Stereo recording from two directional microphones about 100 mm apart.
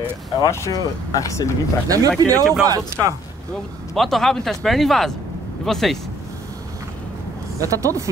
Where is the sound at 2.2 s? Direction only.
35° right (ahead or behind).